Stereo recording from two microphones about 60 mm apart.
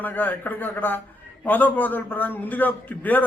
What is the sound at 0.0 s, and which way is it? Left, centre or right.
A man's voice, left.